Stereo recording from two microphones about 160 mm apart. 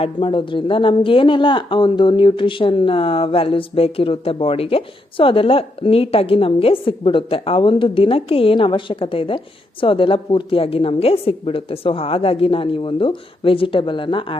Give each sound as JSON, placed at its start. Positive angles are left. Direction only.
{"t": 0.0, "sound": "speech", "side_deg": 30}